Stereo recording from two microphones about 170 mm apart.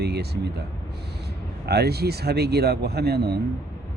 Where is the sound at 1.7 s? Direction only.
70° right (ahead or behind).